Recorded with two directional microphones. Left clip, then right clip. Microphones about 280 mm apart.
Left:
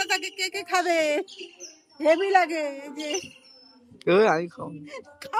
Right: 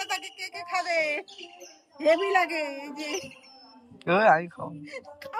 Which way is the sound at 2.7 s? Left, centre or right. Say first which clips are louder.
Even; left.